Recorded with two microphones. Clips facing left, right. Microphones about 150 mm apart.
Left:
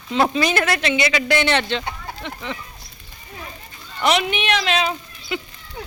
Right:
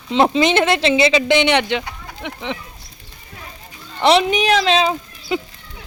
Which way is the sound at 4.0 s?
30° right (ahead or behind).